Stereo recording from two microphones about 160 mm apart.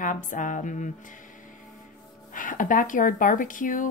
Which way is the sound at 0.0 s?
55° left (ahead or behind).